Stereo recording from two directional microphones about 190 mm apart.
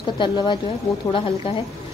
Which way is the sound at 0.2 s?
25° left (ahead or behind).